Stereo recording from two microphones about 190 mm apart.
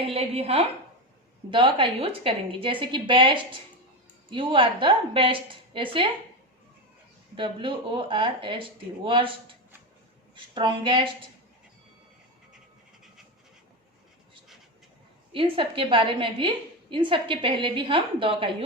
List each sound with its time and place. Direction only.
0.1 s a woman's voice: 30° right (ahead or behind)
7.3 s a woman's voice: 25° right (ahead or behind)
10.3 s a woman's voice: 25° right (ahead or behind)
15.3 s a woman's voice: 30° right (ahead or behind)